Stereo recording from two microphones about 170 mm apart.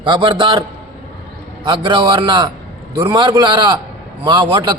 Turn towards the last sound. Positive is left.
turn(degrees=-25)  # may be behind; listen again after turning